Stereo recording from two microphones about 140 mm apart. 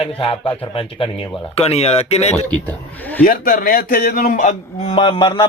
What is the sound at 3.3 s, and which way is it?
A man's voice, 90° left.